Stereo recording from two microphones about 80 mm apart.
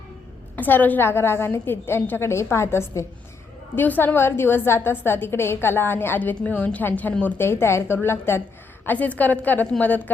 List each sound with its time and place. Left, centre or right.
0.5 s a woman's voice: left
3.8 s a woman's voice: left
7.3 s a woman's voice: left